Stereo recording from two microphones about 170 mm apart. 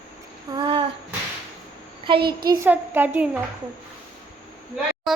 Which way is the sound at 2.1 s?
60° right (ahead or behind).